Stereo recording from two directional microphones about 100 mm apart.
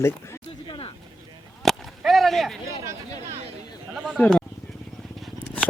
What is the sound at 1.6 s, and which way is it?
Whip, centre (ahead or behind).